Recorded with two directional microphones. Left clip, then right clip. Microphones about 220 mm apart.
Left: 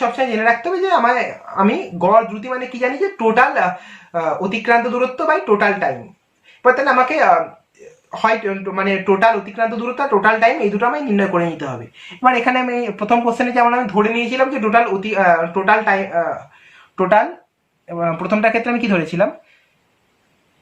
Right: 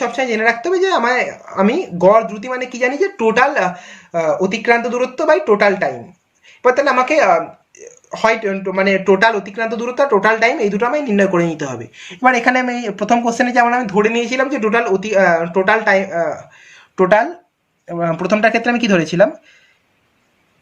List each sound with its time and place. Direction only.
0.0 s speech: 45° right (ahead or behind)